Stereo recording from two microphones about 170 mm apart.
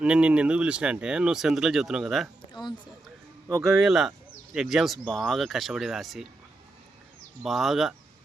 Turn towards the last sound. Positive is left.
turn(degrees=0)  # may be behind; listen again after turning